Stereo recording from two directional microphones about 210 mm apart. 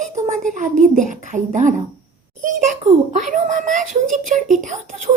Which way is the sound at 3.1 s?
35° right (ahead or behind).